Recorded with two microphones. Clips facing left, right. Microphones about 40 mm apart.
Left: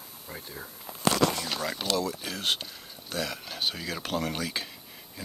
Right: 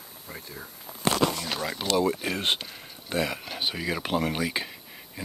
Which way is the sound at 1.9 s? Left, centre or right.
Right.